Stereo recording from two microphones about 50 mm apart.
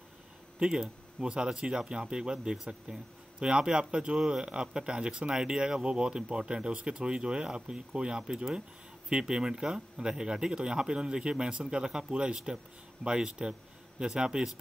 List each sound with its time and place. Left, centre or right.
0.6 s a man's voice: centre